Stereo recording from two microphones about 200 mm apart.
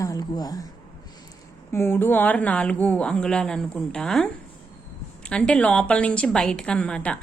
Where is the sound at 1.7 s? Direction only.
10° left (ahead or behind).